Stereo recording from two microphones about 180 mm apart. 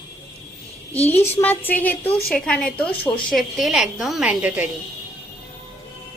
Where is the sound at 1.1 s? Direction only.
10° left (ahead or behind); by 4.7 s 10° right (ahead or behind).